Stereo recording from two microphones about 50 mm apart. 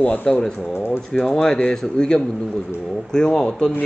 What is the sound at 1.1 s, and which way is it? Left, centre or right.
Speech, centre.